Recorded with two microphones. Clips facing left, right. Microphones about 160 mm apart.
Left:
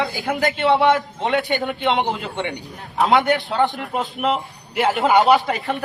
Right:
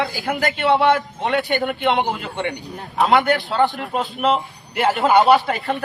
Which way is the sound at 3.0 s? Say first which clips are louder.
Even; 20° left (ahead or behind).